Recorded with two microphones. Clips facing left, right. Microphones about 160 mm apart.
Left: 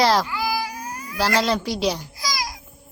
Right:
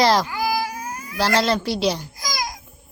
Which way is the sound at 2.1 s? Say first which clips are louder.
Even; 50° right (ahead or behind).